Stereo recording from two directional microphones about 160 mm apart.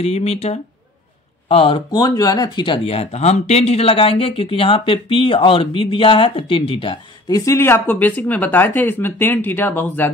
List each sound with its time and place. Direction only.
0.0 s speech: 40° left (ahead or behind); by 10.0 s 10° left (ahead or behind)